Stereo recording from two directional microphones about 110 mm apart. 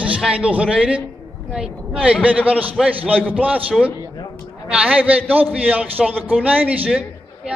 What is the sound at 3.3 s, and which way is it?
A man's voice, 15° right (ahead or behind).